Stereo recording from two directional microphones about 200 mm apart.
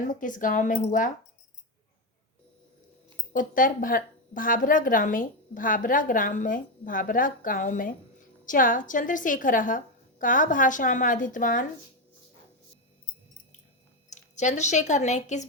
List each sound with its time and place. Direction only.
0.2 s a woman's voice: 40° left (ahead or behind)
3.3 s a woman's voice: 40° left (ahead or behind)
14.1 s speech: 35° left (ahead or behind)